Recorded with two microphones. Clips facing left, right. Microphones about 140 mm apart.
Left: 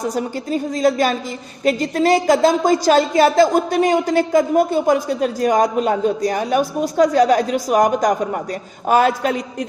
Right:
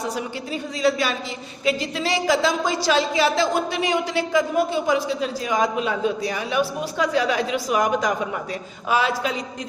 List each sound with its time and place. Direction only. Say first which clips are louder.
0.1 s a woman's voice: left 6 dB; 45° left (ahead or behind)